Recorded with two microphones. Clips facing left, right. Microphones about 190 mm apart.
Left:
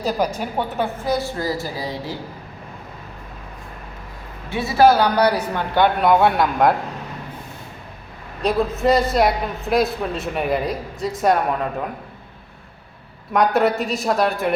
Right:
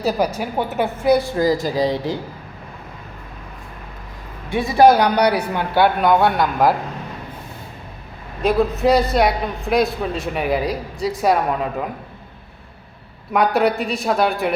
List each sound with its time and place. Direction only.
0.3 s speech: 10° right (ahead or behind)
4.4 s speech: 15° right (ahead or behind)
8.4 s a man's voice: centre (ahead or behind)
13.3 s a man's voice: centre (ahead or behind)